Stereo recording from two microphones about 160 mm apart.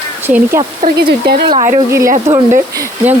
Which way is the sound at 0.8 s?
70° right (ahead or behind).